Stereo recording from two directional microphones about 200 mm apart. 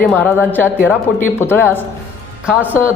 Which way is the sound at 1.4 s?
10° left (ahead or behind).